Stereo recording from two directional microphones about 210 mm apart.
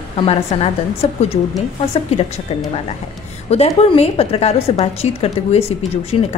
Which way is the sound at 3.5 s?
30° left (ahead or behind).